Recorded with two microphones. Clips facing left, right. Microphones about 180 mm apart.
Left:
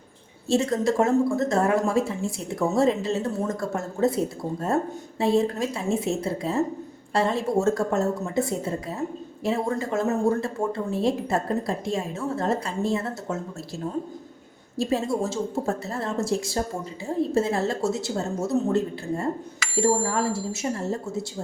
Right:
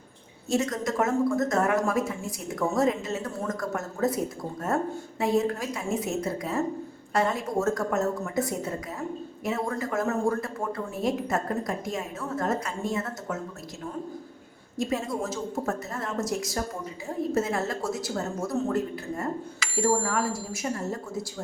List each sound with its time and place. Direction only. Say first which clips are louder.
0.4 s speech: left 5 dB; 30° left (ahead or behind)
5.2 s speech: left 3 dB; 30° left (ahead or behind)
14.8 s speech: left 4 dB; 30° left (ahead or behind)